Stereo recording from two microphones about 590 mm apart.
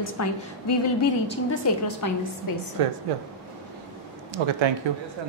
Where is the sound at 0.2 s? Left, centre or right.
Left.